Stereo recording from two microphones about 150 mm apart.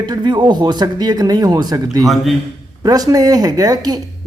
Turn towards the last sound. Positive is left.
turn(degrees=-25)  # may be behind; listen again after turning